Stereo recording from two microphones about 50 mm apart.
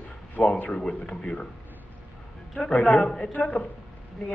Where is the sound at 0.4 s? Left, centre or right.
Left.